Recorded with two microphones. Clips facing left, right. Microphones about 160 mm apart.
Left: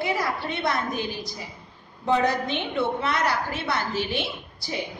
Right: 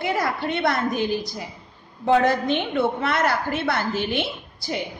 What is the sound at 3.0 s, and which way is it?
A woman's voice, 55° right (ahead or behind).